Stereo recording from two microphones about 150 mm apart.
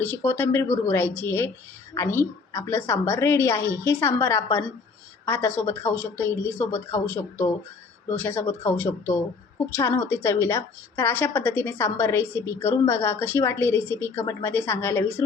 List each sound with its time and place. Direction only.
0.0 s a woman's voice: 10° left (ahead or behind)